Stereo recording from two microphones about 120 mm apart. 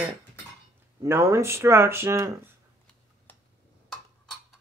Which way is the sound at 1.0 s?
20° right (ahead or behind).